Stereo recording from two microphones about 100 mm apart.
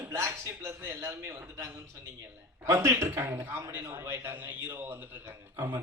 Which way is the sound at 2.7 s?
25° right (ahead or behind).